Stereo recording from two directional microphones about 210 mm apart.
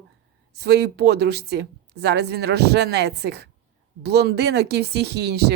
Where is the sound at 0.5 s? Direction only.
50° right (ahead or behind).